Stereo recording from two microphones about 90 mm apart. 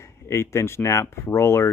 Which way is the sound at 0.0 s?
30° left (ahead or behind).